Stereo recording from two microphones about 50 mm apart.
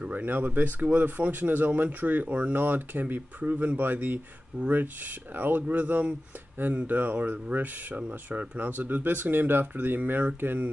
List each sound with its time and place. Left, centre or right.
0.0 s speech: right